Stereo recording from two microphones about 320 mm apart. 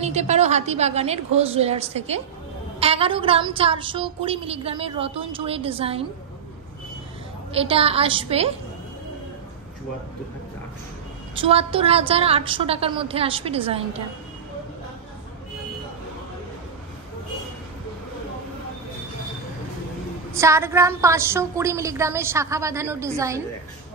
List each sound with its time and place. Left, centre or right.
0.0 s a woman's voice: right
7.5 s a woman's voice: centre
11.3 s a woman's voice: centre
20.3 s a woman's voice: centre